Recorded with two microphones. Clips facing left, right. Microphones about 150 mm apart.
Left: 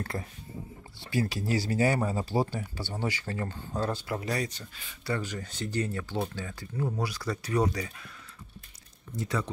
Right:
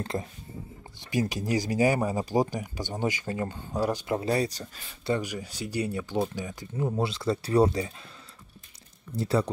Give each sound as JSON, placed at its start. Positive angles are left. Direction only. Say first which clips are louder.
{"t": 0.0, "sound": "speech", "louder": "right 4 dB", "side_deg": -20}
{"t": 5.0, "sound": "speech", "louder": "right 4 dB", "side_deg": -15}
{"t": 9.1, "sound": "speech", "louder": "right 6 dB", "side_deg": -30}